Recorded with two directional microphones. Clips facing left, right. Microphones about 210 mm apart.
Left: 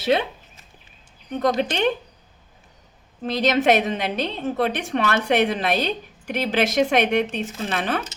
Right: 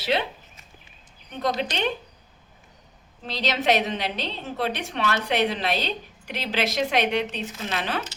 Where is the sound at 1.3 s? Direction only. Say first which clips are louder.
Left 5 dB; 50° left (ahead or behind).